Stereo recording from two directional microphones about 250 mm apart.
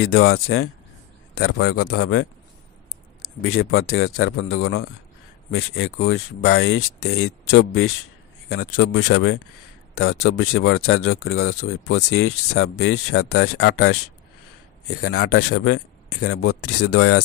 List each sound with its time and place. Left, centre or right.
0.0 s speech: left
1.7 s speech: left
2.0 s speech: left
9.0 s speech: left
15.0 s speech: left
16.2 s speech: left
16.9 s speech: left